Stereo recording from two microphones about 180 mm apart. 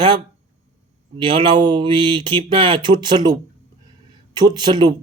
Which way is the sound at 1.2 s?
25° right (ahead or behind).